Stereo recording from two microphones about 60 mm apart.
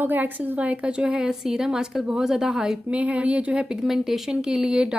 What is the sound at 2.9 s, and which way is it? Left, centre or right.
Speech, right.